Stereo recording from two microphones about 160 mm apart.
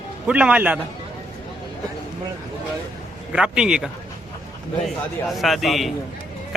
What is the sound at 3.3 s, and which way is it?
Speech, 5° right (ahead or behind).